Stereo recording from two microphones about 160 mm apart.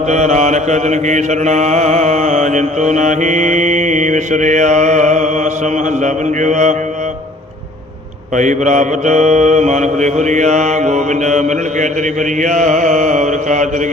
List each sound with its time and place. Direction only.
0.1 s mantra: 45° right (ahead or behind)
8.4 s mantra: 50° right (ahead or behind)